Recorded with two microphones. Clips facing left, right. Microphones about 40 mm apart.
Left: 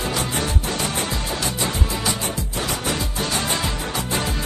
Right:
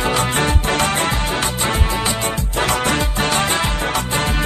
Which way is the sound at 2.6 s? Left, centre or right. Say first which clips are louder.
Right 7 dB; right.